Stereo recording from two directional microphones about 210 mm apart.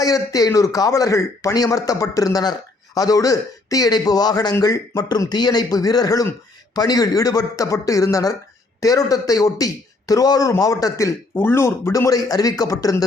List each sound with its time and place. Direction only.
0.0 s a man's voice: 15° left (ahead or behind)